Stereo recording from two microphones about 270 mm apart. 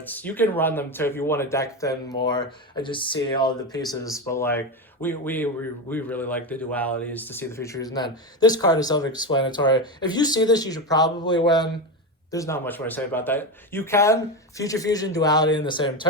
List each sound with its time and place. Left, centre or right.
0.0 s speech: centre